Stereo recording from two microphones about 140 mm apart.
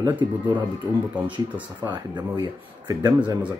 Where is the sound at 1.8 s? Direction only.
30° right (ahead or behind).